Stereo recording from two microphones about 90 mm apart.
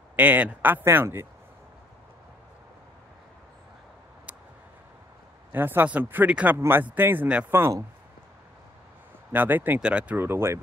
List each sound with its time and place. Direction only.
0.1 s speech: 20° right (ahead or behind)
5.5 s speech: 25° right (ahead or behind)
9.3 s speech: 20° right (ahead or behind)
10.2 s speech: 30° right (ahead or behind)